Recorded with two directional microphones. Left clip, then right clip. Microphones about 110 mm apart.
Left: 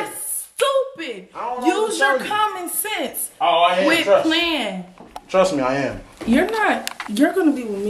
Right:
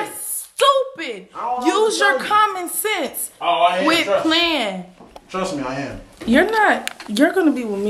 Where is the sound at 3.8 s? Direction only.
15° right (ahead or behind).